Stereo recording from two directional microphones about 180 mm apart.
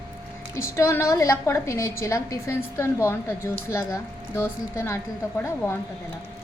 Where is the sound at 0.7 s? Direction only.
15° left (ahead or behind).